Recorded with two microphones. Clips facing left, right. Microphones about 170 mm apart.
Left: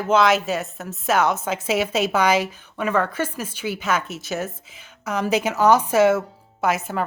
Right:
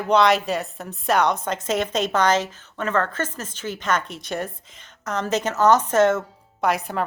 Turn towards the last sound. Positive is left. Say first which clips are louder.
# even
turn(degrees=0)  # may be behind; listen again after turning